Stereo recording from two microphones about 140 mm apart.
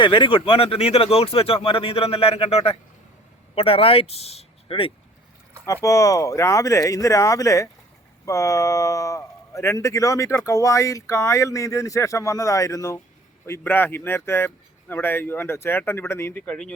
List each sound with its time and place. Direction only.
0.0 s speech: 35° left (ahead or behind)
5.6 s a man's voice: 20° left (ahead or behind)